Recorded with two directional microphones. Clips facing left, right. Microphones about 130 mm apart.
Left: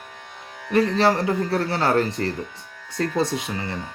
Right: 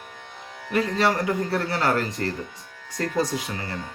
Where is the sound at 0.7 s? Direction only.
30° left (ahead or behind).